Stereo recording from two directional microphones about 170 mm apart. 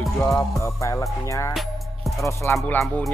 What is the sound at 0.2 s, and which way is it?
Music, 20° left (ahead or behind).